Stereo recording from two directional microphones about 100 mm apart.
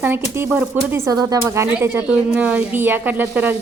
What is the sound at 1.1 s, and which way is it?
Speech, 35° right (ahead or behind).